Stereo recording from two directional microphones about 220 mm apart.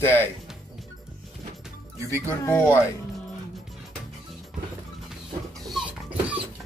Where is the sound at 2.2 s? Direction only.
10° left (ahead or behind).